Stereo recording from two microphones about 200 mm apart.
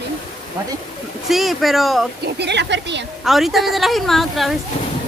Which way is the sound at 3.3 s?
Centre (ahead or behind).